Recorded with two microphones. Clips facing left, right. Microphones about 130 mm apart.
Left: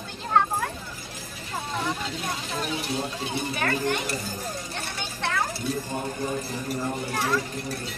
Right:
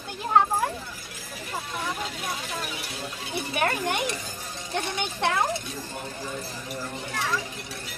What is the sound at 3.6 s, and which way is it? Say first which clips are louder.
Speech: right 2 dB; 20° right (ahead or behind).